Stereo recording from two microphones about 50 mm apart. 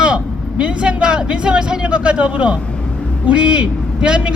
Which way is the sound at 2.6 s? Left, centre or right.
Left.